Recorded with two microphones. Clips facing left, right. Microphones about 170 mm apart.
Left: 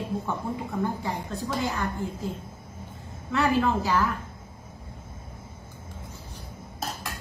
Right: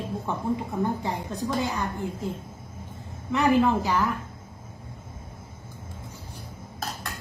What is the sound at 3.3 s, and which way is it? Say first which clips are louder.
Speech: right 3 dB; 15° right (ahead or behind).